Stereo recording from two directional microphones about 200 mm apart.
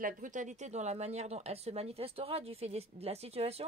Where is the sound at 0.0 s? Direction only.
40° right (ahead or behind).